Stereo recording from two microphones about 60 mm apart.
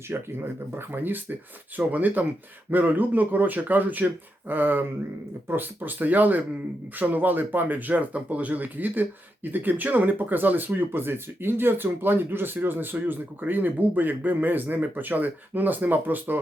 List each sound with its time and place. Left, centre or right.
0.1 s speech: right